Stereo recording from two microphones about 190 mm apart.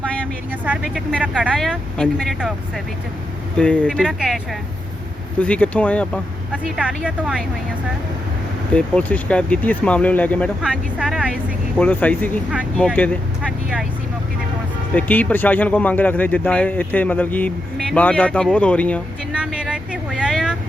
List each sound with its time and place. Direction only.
0.0 s vehicle: 5° left (ahead or behind)
0.6 s speech: 10° right (ahead or behind)
3.6 s speech: 5° left (ahead or behind)
5.4 s speech: 5° left (ahead or behind)
6.5 s speech: 5° right (ahead or behind)
8.7 s speech: 5° left (ahead or behind)
10.6 s speech: 5° right (ahead or behind)
11.8 s speech: 10° left (ahead or behind)
14.9 s speech: 10° left (ahead or behind)
19.3 s vehicle: 5° right (ahead or behind)